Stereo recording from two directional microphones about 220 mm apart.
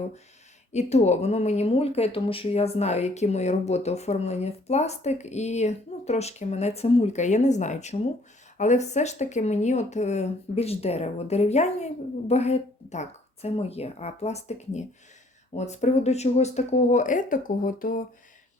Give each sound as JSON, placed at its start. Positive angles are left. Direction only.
{"t": 0.7, "sound": "speech", "side_deg": 30}